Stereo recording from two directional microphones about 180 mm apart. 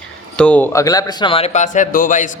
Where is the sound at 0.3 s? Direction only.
5° left (ahead or behind).